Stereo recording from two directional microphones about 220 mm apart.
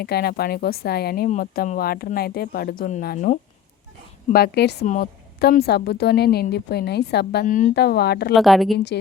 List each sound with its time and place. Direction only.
0.0 s a woman's voice: 45° left (ahead or behind)
8.3 s a woman's voice: centre (ahead or behind)